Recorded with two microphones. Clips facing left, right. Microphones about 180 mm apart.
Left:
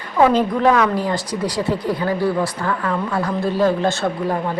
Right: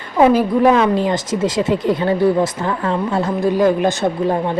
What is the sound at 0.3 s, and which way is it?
A woman's voice, 15° right (ahead or behind).